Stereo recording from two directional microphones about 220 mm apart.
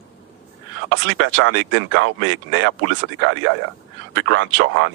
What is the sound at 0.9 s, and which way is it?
Speech, 60° right (ahead or behind).